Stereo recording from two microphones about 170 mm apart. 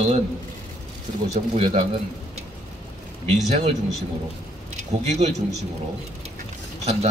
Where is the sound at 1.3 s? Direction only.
40° right (ahead or behind).